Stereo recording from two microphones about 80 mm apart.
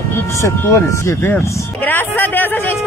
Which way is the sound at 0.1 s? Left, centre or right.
Left.